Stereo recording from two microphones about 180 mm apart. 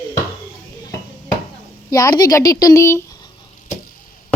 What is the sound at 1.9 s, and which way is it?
A woman's voice, 20° left (ahead or behind).